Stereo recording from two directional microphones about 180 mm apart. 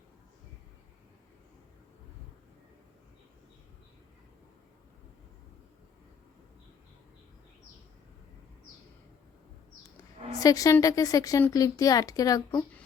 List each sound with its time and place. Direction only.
10.4 s speech: 20° left (ahead or behind)